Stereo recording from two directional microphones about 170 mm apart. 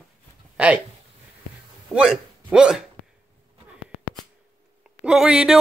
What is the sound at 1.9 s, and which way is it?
Speech, 5° right (ahead or behind).